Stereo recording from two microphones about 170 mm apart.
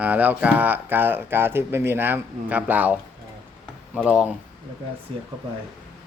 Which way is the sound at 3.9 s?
5° right (ahead or behind).